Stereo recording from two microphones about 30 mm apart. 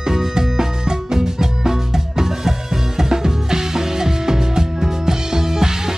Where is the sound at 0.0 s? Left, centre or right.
Centre.